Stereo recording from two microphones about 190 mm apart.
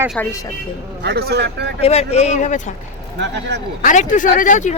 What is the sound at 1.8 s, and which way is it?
Speech, 35° left (ahead or behind).